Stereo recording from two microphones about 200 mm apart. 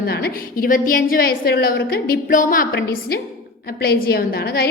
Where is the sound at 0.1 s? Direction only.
45° left (ahead or behind).